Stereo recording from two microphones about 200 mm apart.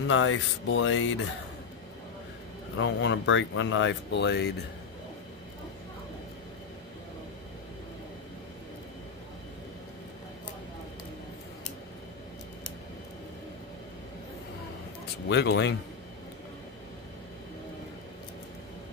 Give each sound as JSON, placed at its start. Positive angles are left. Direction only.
{"t": 0.1, "sound": "speech", "side_deg": 80}
{"t": 2.8, "sound": "speech", "side_deg": 65}
{"t": 15.2, "sound": "speech", "side_deg": 60}